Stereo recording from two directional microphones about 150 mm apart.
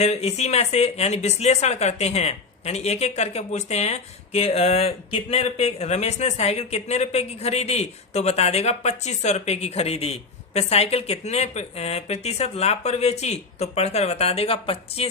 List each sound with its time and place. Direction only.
0.0 s speech: 45° left (ahead or behind)